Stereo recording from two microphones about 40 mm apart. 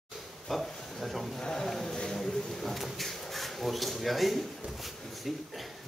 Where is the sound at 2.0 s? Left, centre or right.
Centre.